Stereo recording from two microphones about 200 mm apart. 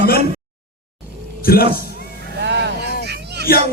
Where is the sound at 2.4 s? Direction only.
60° right (ahead or behind).